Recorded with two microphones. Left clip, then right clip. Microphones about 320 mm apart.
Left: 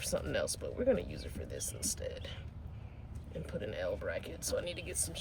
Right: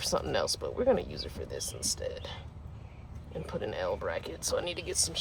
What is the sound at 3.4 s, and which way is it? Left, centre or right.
Speech, centre.